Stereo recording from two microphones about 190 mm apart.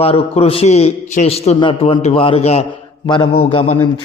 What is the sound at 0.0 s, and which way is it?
A man's voice, 30° left (ahead or behind).